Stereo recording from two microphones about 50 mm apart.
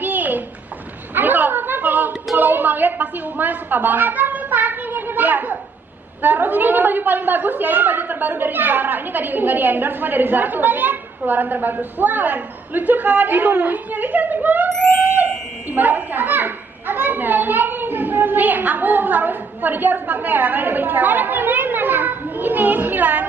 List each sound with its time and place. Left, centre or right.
0.0 s a sound: right
6.2 s a woman's voice: right
15.7 s a woman's voice: right